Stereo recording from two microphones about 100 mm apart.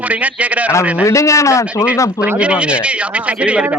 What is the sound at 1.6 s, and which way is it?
Speech, 10° right (ahead or behind).